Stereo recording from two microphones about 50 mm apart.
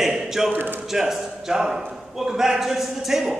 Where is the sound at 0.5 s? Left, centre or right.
Right.